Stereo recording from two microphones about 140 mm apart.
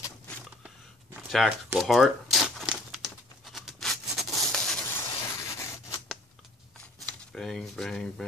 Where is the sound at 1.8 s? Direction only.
Centre (ahead or behind).